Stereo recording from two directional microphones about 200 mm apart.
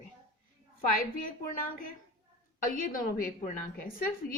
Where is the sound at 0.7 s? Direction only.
45° left (ahead or behind).